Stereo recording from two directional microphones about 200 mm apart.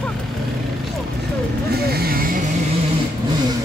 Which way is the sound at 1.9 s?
50° right (ahead or behind).